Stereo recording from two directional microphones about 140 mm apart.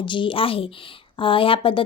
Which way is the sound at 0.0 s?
35° left (ahead or behind).